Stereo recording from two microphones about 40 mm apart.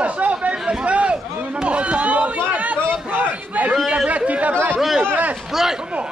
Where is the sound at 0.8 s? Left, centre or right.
Right.